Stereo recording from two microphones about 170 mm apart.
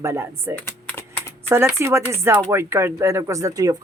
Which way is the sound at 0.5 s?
10° left (ahead or behind).